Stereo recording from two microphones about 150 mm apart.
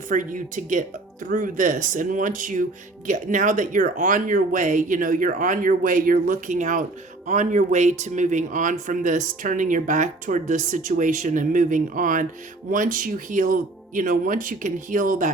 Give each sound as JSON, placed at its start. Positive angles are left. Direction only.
{"t": 0.1, "sound": "speech", "side_deg": -60}